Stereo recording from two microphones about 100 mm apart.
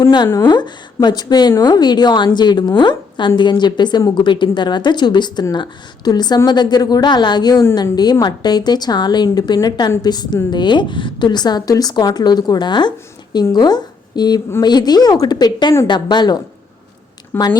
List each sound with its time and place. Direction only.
0.0 s a woman's voice: 45° left (ahead or behind)